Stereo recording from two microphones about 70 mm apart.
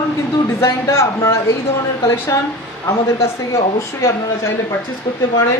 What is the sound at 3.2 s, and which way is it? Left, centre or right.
Speech, left.